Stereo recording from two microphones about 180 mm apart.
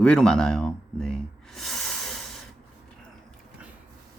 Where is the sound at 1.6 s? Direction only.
Centre (ahead or behind).